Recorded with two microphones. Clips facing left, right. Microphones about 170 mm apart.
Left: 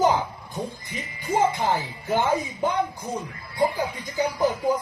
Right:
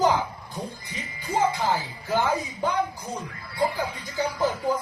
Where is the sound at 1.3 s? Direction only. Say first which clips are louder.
Left 2 dB; 20° left (ahead or behind).